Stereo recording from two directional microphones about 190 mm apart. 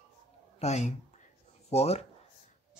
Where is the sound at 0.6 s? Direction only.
35° left (ahead or behind).